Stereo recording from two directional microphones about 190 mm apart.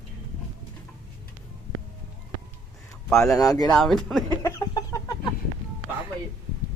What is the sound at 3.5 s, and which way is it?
Speech, 20° left (ahead or behind).